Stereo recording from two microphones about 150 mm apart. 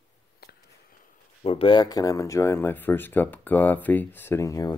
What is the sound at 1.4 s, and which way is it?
Speech, 40° left (ahead or behind).